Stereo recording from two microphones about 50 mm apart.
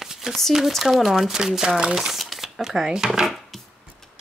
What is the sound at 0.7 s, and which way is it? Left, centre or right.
Speech, centre.